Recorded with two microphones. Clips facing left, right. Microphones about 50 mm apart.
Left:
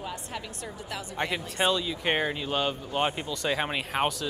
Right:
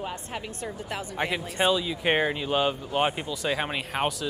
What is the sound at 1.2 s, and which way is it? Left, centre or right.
Speech, centre.